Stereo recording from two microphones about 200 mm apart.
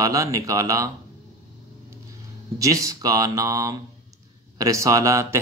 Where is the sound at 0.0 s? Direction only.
15° right (ahead or behind).